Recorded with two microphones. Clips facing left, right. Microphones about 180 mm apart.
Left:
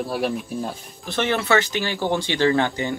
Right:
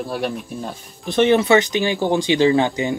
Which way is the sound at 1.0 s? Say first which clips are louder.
Right 7 dB; 15° right (ahead or behind).